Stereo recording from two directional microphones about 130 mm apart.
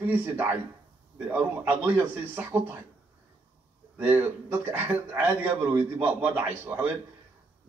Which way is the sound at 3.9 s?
15° right (ahead or behind).